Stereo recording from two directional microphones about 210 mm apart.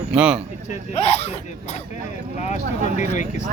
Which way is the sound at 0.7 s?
30° left (ahead or behind).